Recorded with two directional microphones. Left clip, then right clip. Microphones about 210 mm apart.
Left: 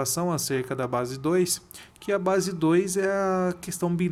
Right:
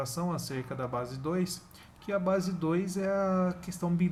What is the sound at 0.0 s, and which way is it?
Speech, 55° left (ahead or behind).